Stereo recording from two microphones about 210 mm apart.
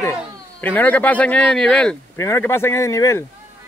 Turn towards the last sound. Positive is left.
turn(degrees=15)  # may be behind; listen again after turning